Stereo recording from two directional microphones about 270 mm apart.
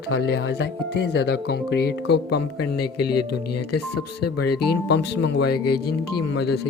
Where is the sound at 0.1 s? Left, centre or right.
Left.